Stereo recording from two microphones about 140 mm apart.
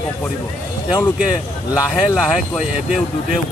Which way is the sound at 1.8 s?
25° left (ahead or behind).